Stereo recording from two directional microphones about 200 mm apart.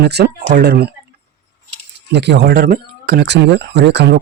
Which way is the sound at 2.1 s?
60° right (ahead or behind).